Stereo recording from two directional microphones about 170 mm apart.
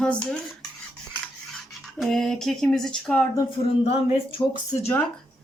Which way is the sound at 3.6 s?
40° left (ahead or behind).